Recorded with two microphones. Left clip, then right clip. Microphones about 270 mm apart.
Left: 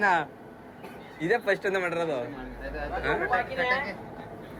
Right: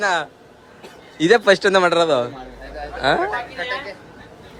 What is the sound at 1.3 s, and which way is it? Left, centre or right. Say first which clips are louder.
Speech: right 12 dB; right.